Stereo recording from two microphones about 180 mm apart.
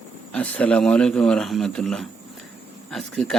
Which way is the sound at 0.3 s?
5° left (ahead or behind).